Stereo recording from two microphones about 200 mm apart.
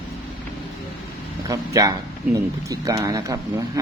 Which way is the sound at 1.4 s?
15° right (ahead or behind).